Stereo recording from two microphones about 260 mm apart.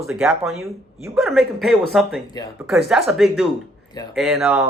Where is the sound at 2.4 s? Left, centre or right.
Centre.